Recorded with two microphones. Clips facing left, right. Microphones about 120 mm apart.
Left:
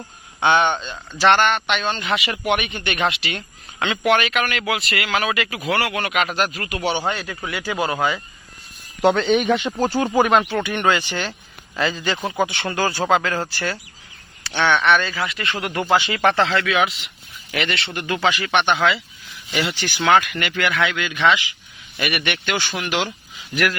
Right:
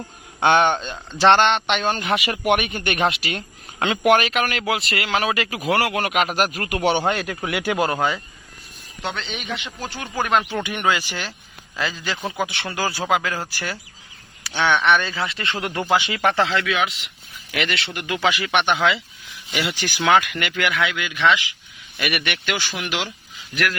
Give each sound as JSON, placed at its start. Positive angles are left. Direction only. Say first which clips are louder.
{"t": 0.3, "sound": "a man's voice", "louder": "right 1 dB", "side_deg": -45}
{"t": 1.2, "sound": "speech", "louder": "right 1 dB", "side_deg": -25}
{"t": 1.9, "sound": "a man's voice", "louder": "right 1 dB", "side_deg": -45}
{"t": 7.3, "sound": "speech", "louder": "right 3 dB", "side_deg": -65}
{"t": 7.8, "sound": "speech", "louder": "left 2 dB", "side_deg": 5}
{"t": 9.1, "sound": "speech", "louder": "left 13 dB", "side_deg": 50}
{"t": 10.5, "sound": "speech", "louder": "left 2 dB", "side_deg": -15}
{"t": 15.9, "sound": "speech", "louder": "left 2 dB", "side_deg": -15}
{"t": 16.6, "sound": "speech", "louder": "left 3 dB", "side_deg": 0}